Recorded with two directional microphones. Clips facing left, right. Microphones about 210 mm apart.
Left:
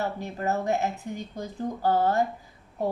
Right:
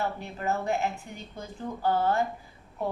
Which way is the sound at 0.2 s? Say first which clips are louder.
Left 2 dB; 40° left (ahead or behind).